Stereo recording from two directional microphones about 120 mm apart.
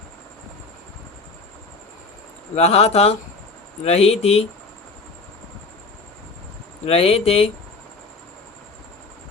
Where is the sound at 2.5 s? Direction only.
60° left (ahead or behind).